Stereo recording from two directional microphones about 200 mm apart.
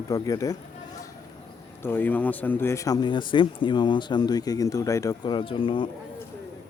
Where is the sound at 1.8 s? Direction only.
10° left (ahead or behind); by 5.9 s 25° left (ahead or behind).